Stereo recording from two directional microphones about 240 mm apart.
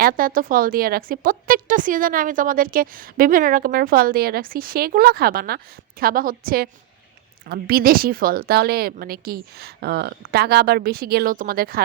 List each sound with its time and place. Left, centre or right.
0.0 s a woman's voice: right